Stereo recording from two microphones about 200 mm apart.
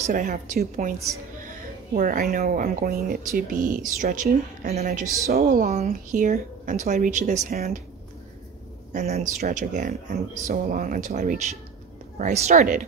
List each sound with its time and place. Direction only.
0.0 s speech: 40° right (ahead or behind)
2.0 s speech: 45° right (ahead or behind)
8.9 s speech: 35° right (ahead or behind)